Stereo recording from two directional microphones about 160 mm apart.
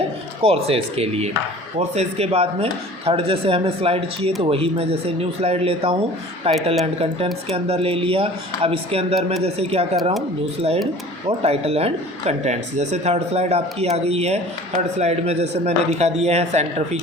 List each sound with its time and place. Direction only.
0.4 s speech: 40° right (ahead or behind)
11.3 s speech: 40° right (ahead or behind)